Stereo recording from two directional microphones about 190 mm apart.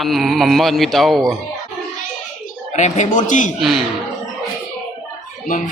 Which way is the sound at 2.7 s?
40° left (ahead or behind).